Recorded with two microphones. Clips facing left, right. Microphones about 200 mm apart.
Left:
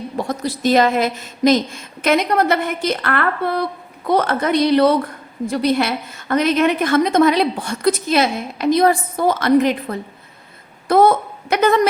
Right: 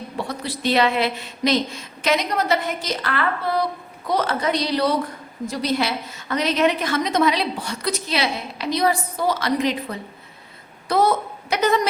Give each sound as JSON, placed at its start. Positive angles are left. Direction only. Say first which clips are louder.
{"t": 0.2, "sound": "a woman's voice", "louder": "left 6 dB", "side_deg": 45}